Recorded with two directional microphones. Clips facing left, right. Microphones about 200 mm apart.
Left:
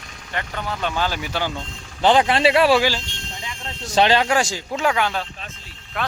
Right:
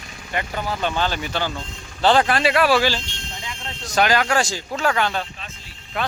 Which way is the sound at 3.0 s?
45° left (ahead or behind).